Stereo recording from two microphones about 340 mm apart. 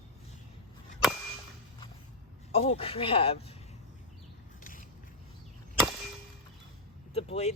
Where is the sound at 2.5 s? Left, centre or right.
Centre.